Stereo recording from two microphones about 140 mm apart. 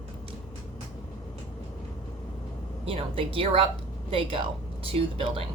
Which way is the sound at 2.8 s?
40° right (ahead or behind).